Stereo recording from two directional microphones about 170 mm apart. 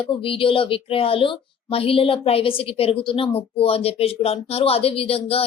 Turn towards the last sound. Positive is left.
turn(degrees=35)  # may be behind; listen again after turning